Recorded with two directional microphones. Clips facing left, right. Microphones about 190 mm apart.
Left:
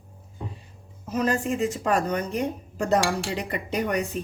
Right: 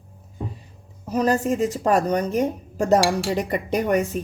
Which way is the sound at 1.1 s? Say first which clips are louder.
Right 4 dB; 35° right (ahead or behind).